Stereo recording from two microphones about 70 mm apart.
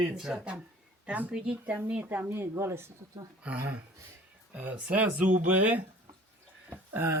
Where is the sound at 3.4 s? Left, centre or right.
Centre.